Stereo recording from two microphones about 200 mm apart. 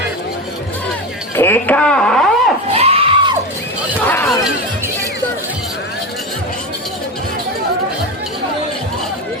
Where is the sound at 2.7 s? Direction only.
30° right (ahead or behind).